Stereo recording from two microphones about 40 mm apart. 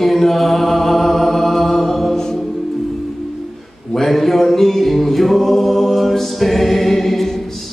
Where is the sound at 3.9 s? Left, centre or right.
Centre.